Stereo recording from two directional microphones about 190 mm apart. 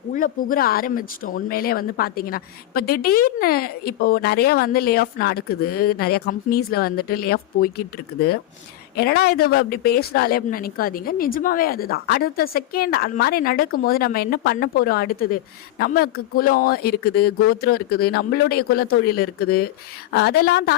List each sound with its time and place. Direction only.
0.1 s speech: 45° left (ahead or behind)
9.0 s a woman's voice: 55° left (ahead or behind)